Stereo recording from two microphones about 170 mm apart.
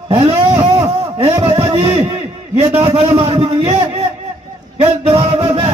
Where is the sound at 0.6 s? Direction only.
35° right (ahead or behind).